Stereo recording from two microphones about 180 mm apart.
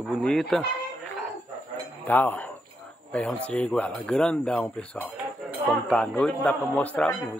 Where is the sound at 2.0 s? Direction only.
10° left (ahead or behind).